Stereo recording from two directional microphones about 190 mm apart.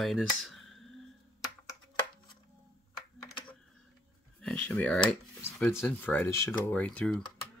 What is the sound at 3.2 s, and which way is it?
Typing, 25° left (ahead or behind).